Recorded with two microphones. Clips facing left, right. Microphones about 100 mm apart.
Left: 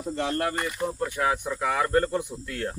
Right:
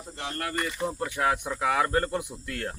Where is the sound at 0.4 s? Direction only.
20° left (ahead or behind).